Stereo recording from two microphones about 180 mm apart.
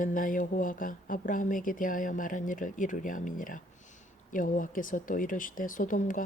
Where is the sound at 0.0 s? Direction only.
50° left (ahead or behind).